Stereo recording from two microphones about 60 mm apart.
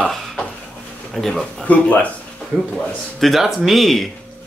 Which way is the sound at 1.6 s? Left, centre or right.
Left.